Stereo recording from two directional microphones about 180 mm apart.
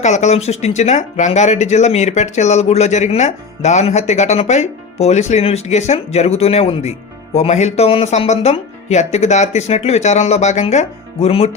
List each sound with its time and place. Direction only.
0.0 s speech: 40° left (ahead or behind)